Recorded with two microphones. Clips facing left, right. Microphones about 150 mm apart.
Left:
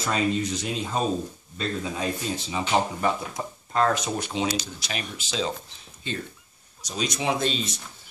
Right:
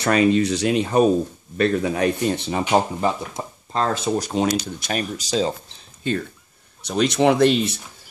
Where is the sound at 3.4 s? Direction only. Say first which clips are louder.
Left 1 dB; 25° right (ahead or behind); by 5.5 s 40° right (ahead or behind).